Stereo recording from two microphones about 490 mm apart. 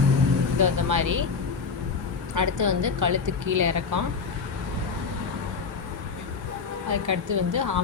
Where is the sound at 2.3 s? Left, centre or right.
Right.